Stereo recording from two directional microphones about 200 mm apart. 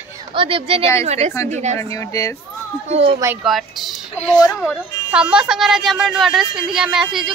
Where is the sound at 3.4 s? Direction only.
Centre (ahead or behind).